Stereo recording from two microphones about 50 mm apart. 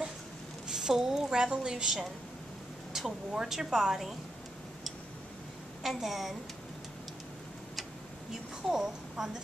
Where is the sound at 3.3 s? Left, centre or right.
Centre.